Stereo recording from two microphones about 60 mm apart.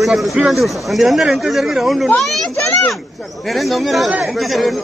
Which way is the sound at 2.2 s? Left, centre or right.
Centre.